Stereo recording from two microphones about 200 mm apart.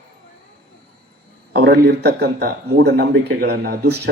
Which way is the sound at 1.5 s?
55° right (ahead or behind).